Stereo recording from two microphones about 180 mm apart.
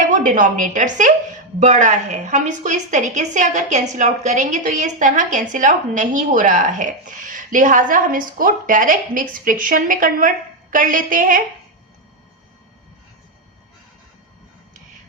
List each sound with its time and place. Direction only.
0.1 s a woman's voice: 45° right (ahead or behind)